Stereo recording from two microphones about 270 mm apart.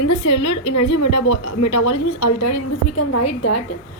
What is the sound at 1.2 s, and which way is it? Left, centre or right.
Speech, left.